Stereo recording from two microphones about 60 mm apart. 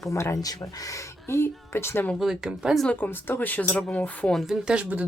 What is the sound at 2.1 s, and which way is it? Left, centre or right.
Speech, centre.